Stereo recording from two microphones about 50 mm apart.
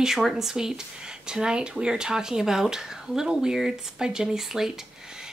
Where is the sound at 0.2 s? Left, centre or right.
Centre.